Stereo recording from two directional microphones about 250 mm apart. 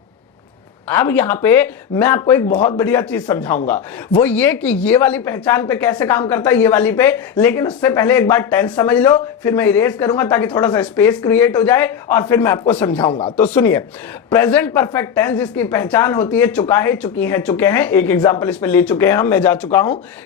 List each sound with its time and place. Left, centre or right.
0.9 s speech: centre
13.0 s speech: left
13.3 s speech: centre